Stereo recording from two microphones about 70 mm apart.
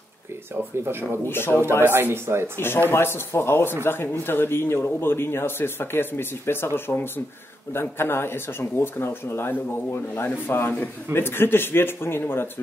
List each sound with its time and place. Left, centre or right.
1.2 s speech: left
1.9 s speech: right
2.5 s speech: left